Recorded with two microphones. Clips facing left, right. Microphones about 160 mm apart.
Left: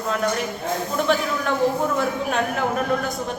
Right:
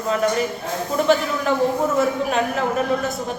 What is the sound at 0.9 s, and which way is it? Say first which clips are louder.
Speech: right 4 dB; centre (ahead or behind).